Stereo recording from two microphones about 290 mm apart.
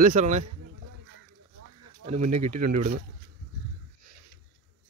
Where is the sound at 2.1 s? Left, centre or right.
Right.